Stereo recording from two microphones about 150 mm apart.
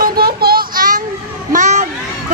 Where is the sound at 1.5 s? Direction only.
55° right (ahead or behind).